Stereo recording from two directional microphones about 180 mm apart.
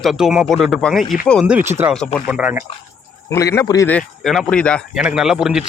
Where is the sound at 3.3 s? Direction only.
15° left (ahead or behind).